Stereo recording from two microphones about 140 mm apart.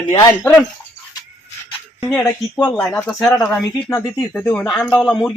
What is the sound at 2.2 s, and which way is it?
Speech, 25° left (ahead or behind).